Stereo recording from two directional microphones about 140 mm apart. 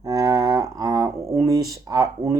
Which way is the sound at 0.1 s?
25° right (ahead or behind).